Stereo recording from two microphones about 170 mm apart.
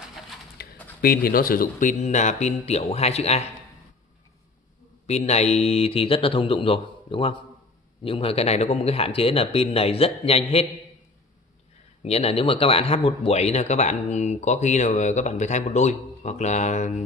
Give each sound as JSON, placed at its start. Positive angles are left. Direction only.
{"t": 0.6, "sound": "a sound", "side_deg": 70}
{"t": 1.0, "sound": "speech", "side_deg": 60}
{"t": 5.0, "sound": "speech", "side_deg": 40}
{"t": 12.0, "sound": "speech", "side_deg": 35}